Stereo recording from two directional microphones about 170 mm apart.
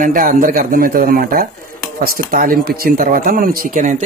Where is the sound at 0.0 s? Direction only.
50° right (ahead or behind).